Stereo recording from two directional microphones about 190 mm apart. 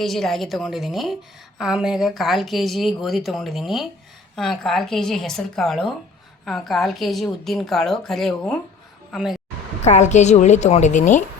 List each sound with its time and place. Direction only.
0.0 s speech: centre (ahead or behind)
9.8 s a woman's voice: 35° left (ahead or behind)